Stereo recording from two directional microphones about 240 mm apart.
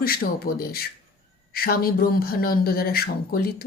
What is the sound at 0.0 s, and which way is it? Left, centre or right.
A woman's voice, left.